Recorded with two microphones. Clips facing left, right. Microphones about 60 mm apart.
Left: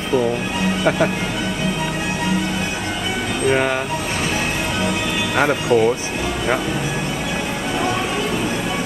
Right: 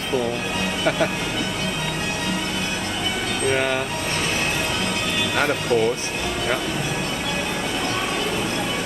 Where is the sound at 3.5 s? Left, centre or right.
Centre.